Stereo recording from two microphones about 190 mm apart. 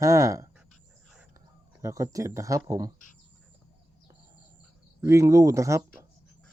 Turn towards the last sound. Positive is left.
turn(degrees=-15)  # may be behind; listen again after turning